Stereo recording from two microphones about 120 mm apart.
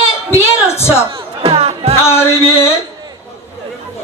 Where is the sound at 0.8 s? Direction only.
20° left (ahead or behind).